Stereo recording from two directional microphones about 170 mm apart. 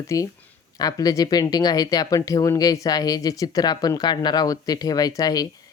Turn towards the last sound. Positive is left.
turn(degrees=20)  # may be behind; listen again after turning